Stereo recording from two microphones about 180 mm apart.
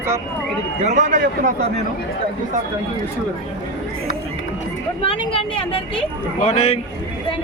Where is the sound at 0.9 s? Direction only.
40° right (ahead or behind).